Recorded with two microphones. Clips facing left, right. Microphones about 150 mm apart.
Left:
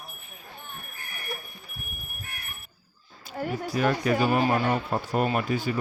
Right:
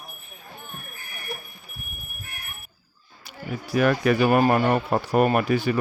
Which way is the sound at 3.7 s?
70° right (ahead or behind).